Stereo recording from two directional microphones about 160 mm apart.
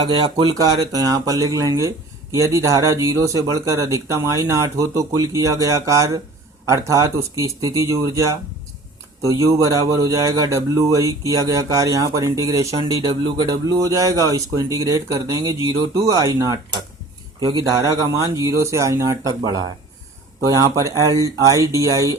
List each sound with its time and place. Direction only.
0.0 s speech: 35° right (ahead or behind)
13.0 s speech: 30° right (ahead or behind)